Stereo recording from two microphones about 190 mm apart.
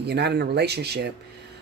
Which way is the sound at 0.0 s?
60° right (ahead or behind).